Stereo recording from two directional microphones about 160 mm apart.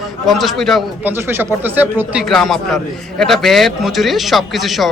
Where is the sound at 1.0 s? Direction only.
15° right (ahead or behind).